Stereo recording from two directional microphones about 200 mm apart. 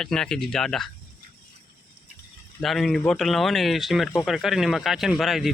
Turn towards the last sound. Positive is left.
turn(degrees=0)  # may be behind; listen again after turning